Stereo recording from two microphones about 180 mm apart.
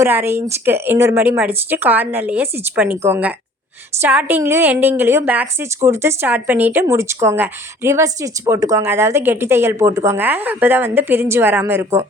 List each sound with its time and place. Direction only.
0.0 s a woman's voice: 15° right (ahead or behind)